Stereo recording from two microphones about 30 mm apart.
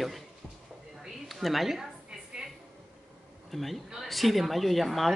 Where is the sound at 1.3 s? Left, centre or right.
Centre.